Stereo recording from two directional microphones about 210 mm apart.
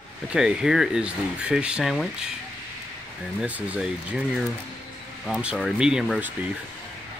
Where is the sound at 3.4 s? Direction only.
5° right (ahead or behind).